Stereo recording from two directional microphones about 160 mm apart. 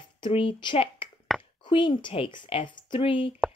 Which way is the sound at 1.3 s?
Centre (ahead or behind).